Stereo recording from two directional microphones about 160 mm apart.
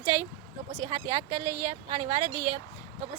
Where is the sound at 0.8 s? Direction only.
35° right (ahead or behind).